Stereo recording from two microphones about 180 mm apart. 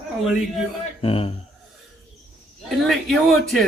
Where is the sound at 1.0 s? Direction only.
30° left (ahead or behind).